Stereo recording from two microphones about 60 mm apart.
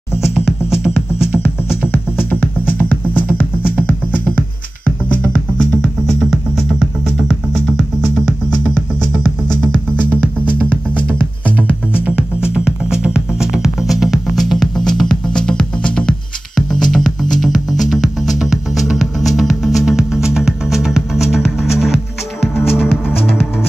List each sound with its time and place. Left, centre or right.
0.3 s music: centre
1.8 s music: left; by 5.9 s centre
6.0 s music: centre
9.9 s music: right; by 16.2 s centre
16.5 s music: centre